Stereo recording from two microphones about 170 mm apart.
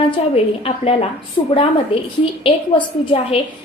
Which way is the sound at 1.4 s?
35° left (ahead or behind).